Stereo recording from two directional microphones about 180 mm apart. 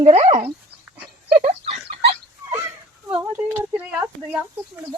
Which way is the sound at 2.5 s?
10° right (ahead or behind).